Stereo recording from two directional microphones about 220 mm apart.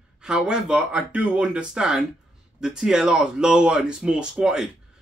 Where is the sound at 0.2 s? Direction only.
5° right (ahead or behind).